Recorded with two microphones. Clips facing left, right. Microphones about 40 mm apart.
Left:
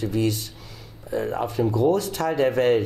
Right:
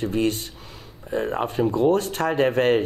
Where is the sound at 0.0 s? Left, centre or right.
Right.